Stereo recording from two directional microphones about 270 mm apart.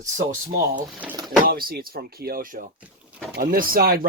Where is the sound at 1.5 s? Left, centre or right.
Right.